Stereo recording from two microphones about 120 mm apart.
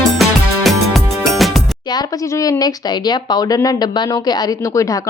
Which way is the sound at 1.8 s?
35° left (ahead or behind).